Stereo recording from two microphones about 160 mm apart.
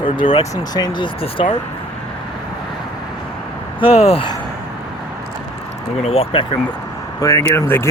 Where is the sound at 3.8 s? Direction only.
40° left (ahead or behind).